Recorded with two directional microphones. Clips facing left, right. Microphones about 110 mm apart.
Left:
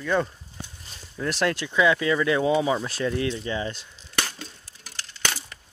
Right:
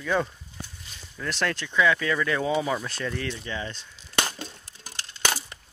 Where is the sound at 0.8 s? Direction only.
35° left (ahead or behind).